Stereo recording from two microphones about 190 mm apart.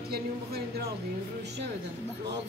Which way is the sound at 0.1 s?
55° right (ahead or behind).